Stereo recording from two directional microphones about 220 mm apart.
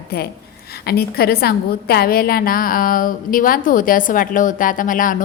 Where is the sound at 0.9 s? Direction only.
45° left (ahead or behind).